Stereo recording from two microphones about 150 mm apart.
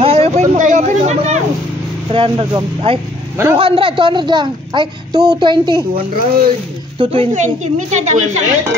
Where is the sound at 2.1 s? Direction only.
35° right (ahead or behind).